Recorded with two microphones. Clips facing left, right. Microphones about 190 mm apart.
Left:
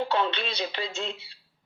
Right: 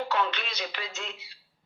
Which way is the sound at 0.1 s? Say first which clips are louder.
Left 3 dB; 30° left (ahead or behind).